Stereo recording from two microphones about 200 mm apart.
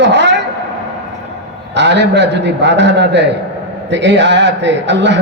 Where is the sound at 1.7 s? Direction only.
60° right (ahead or behind).